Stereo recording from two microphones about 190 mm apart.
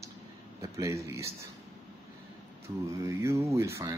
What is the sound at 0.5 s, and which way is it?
Speech, 15° right (ahead or behind).